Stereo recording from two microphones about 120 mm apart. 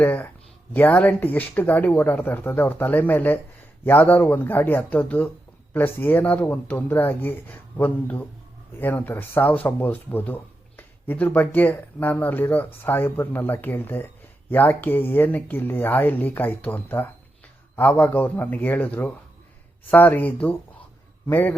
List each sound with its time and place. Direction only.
0.0 s a man's voice: 15° left (ahead or behind)